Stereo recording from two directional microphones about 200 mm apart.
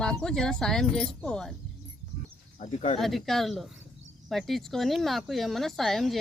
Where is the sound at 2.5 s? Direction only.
35° left (ahead or behind).